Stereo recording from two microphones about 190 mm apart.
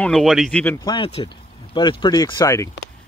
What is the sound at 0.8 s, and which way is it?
Speech, 25° left (ahead or behind).